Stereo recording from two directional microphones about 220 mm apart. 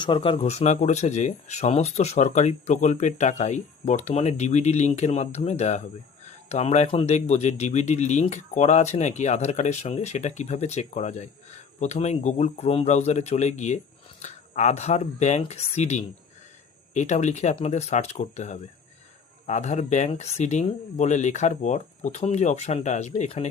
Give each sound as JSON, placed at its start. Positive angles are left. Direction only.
{"t": 0.0, "sound": "speech", "side_deg": 25}